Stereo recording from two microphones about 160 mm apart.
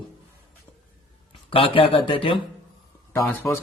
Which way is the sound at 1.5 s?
35° left (ahead or behind).